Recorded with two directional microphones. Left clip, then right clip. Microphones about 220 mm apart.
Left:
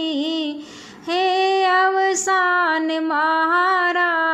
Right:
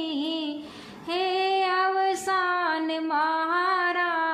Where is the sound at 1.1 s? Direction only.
35° left (ahead or behind).